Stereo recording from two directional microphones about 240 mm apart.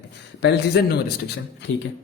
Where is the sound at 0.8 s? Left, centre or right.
Left.